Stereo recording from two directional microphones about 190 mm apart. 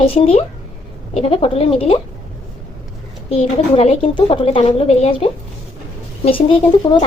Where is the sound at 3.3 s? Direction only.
30° left (ahead or behind).